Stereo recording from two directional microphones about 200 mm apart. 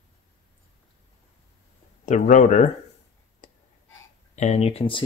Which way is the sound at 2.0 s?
35° left (ahead or behind).